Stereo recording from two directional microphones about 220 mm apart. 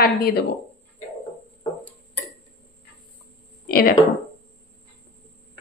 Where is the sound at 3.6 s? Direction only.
40° left (ahead or behind).